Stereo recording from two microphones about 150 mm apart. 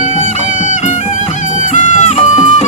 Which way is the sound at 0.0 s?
55° left (ahead or behind).